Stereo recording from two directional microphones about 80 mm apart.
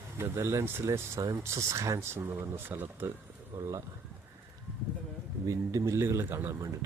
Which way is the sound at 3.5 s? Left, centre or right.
Right.